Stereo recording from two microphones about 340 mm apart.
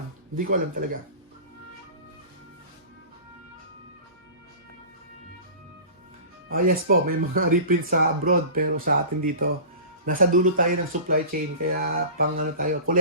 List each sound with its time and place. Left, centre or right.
0.3 s speech: right
6.5 s speech: right